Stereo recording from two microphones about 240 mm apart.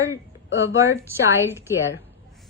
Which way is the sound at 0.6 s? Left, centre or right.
Centre.